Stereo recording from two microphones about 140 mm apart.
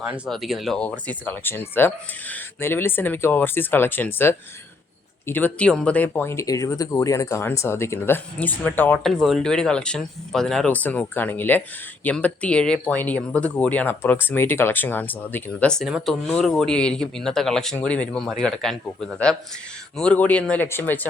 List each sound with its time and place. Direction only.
0.3 s speech: centre (ahead or behind)
9.0 s speech: centre (ahead or behind)